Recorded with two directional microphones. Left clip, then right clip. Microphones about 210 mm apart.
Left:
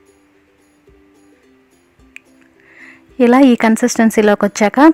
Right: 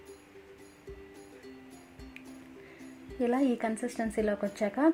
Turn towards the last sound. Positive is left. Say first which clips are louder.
# left 18 dB
turn(degrees=35)  # may be behind; listen again after turning